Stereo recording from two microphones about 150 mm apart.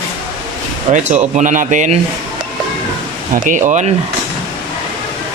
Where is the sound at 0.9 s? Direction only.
50° right (ahead or behind).